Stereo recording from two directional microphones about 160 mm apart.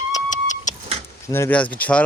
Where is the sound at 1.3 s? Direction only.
15° left (ahead or behind).